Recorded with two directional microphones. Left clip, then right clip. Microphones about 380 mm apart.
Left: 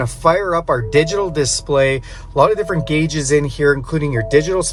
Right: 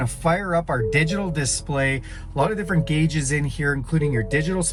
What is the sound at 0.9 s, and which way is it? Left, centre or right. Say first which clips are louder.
Speech: left 8 dB; centre.